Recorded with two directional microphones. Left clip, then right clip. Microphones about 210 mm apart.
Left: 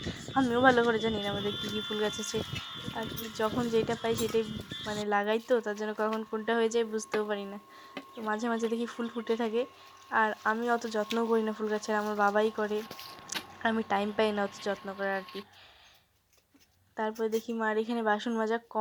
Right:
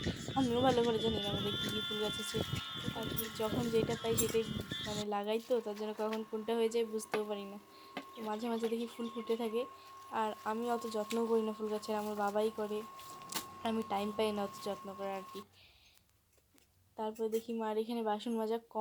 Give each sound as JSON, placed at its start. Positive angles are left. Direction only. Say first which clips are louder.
{"t": 0.0, "sound": "speech", "louder": "left 5 dB", "side_deg": 0}
{"t": 5.0, "sound": "speech", "louder": "left 8 dB", "side_deg": 10}
{"t": 17.0, "sound": "speech", "louder": "left 6 dB", "side_deg": 15}